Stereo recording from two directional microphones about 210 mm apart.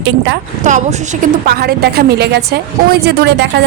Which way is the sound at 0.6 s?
35° right (ahead or behind).